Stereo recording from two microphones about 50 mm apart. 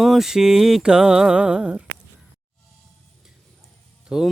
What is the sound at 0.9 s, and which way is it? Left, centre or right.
Mantra, centre.